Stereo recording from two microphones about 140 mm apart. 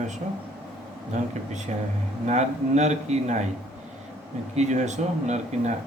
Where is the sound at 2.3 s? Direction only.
55° right (ahead or behind).